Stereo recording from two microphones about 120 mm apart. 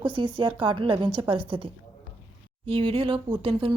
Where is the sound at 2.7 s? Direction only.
50° right (ahead or behind).